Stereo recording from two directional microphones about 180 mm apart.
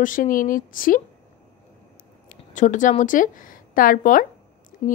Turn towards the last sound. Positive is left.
turn(degrees=30)  # may be behind; listen again after turning